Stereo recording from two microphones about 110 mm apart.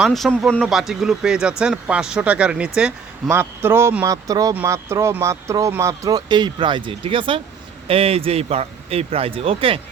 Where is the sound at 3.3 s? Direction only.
20° right (ahead or behind); by 9.7 s 55° right (ahead or behind).